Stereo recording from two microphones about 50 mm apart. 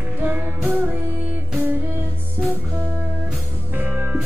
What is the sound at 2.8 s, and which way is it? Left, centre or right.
Music, right.